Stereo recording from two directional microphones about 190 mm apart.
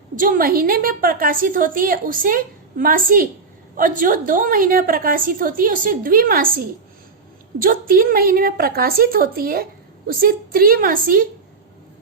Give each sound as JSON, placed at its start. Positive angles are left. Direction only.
{"t": 0.2, "sound": "a woman's voice", "side_deg": -45}